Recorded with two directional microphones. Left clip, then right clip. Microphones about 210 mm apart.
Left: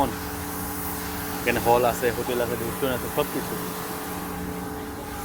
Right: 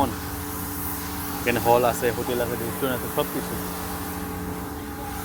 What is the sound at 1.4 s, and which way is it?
Speech, 20° right (ahead or behind).